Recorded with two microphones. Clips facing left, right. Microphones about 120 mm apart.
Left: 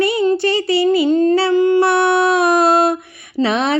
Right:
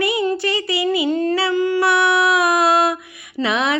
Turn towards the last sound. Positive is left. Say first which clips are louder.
# left 3 dB
turn(degrees=35)  # may be behind; listen again after turning